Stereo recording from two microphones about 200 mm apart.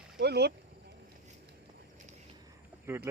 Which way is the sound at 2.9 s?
10° right (ahead or behind).